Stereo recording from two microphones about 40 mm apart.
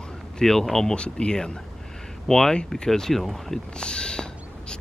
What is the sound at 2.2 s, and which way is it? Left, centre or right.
Speech, centre.